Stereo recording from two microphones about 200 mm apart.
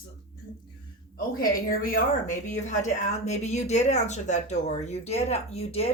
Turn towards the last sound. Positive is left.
turn(degrees=30)  # may be behind; listen again after turning